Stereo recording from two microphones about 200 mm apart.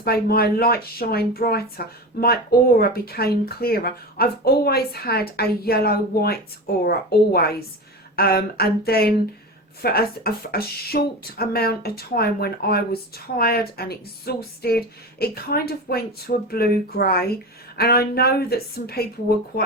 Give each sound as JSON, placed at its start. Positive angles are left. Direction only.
{"t": 0.0, "sound": "speech", "side_deg": 50}
{"t": 8.1, "sound": "speech", "side_deg": 50}